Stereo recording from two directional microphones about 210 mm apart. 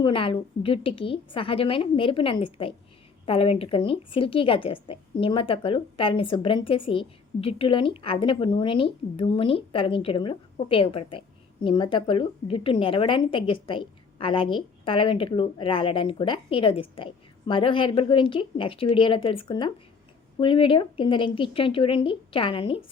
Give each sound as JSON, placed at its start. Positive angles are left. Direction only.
{"t": 0.0, "sound": "a woman's voice", "side_deg": 25}